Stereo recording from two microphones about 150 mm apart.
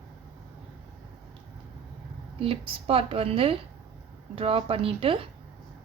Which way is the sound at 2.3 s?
40° right (ahead or behind).